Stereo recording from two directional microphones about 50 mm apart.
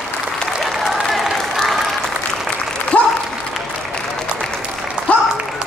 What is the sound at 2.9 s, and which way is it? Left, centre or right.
Applause, left.